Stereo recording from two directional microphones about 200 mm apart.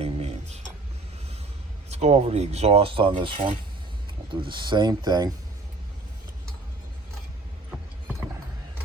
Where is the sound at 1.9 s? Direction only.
35° right (ahead or behind).